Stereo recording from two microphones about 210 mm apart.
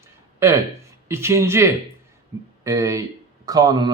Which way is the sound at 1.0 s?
10° right (ahead or behind).